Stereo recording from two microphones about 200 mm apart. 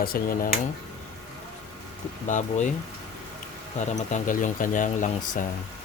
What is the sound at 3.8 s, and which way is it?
Speech, 35° left (ahead or behind).